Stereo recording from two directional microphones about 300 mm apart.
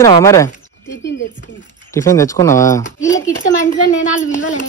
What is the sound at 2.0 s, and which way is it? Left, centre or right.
A man's voice, centre.